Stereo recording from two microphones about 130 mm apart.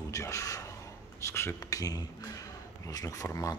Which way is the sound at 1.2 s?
20° left (ahead or behind).